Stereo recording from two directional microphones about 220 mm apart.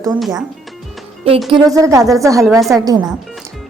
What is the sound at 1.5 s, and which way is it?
Speech, 20° right (ahead or behind).